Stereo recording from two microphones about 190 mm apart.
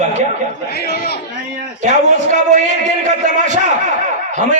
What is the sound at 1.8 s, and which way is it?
A man's voice, 40° right (ahead or behind).